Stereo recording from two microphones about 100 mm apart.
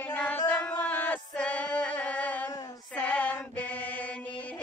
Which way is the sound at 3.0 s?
15° left (ahead or behind).